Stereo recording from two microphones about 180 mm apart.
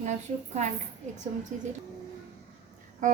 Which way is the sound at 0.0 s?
40° right (ahead or behind).